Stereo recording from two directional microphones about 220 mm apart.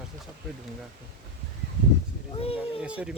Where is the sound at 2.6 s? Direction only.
5° right (ahead or behind).